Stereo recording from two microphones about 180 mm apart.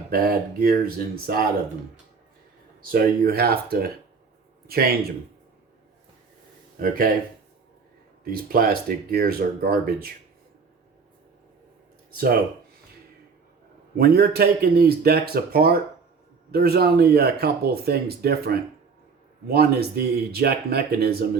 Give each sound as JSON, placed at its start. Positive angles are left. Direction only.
{"t": 0.1, "sound": "speech", "side_deg": -55}
{"t": 2.9, "sound": "speech", "side_deg": -60}
{"t": 6.8, "sound": "speech", "side_deg": -50}
{"t": 8.2, "sound": "speech", "side_deg": -55}
{"t": 12.1, "sound": "speech", "side_deg": -55}
{"t": 13.9, "sound": "speech", "side_deg": -60}